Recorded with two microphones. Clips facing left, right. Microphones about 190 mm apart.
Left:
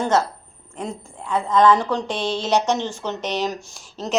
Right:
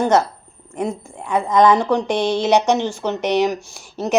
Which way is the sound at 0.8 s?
15° right (ahead or behind).